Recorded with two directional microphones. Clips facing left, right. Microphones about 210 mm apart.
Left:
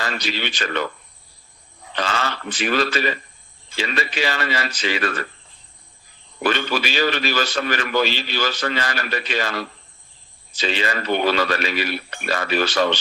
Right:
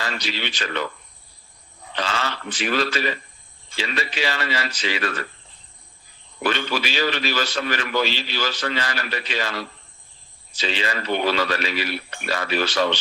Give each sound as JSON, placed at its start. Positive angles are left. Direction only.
{"t": 0.0, "sound": "a man's voice", "side_deg": 50}
{"t": 2.0, "sound": "a man's voice", "side_deg": 50}
{"t": 6.4, "sound": "a man's voice", "side_deg": 50}